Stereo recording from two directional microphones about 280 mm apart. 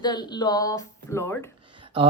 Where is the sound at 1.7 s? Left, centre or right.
Centre.